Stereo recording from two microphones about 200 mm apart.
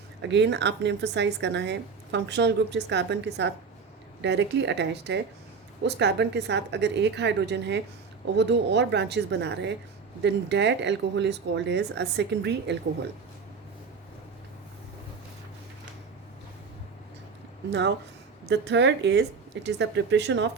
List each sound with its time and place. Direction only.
0.2 s speech: 60° right (ahead or behind)
17.7 s speech: 60° right (ahead or behind)